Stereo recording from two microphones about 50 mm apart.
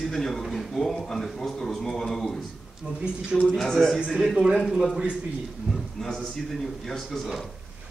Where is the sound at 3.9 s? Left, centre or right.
Centre.